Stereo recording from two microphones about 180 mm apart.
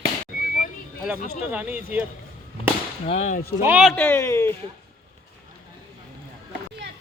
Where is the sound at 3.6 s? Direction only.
10° right (ahead or behind).